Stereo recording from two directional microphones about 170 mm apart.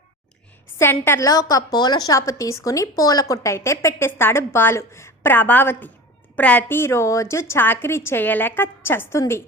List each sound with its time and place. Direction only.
0.8 s a woman's voice: 15° left (ahead or behind)